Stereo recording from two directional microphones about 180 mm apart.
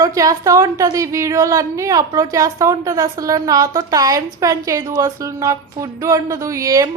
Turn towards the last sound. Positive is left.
turn(degrees=-15)  # may be behind; listen again after turning